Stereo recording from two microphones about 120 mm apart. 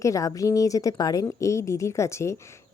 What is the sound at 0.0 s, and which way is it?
Speech, 25° left (ahead or behind).